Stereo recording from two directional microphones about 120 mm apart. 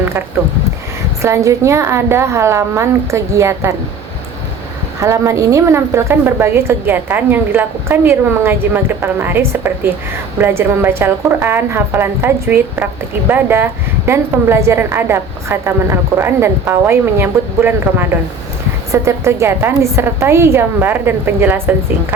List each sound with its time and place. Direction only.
1.2 s a woman's voice: 25° right (ahead or behind)
4.9 s a woman's voice: 25° right (ahead or behind)